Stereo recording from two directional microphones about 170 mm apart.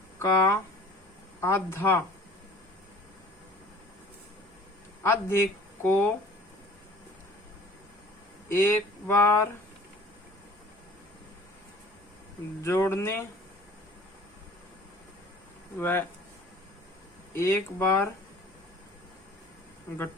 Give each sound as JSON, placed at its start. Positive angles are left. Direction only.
{"t": 0.2, "sound": "speech", "side_deg": 15}
{"t": 5.0, "sound": "speech", "side_deg": 15}
{"t": 8.4, "sound": "speech", "side_deg": 15}
{"t": 12.6, "sound": "speech", "side_deg": 15}
{"t": 15.8, "sound": "speech", "side_deg": 10}
{"t": 17.3, "sound": "speech", "side_deg": 15}